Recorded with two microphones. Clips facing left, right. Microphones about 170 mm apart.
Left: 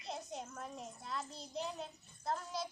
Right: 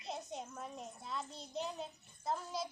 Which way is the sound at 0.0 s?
Centre (ahead or behind).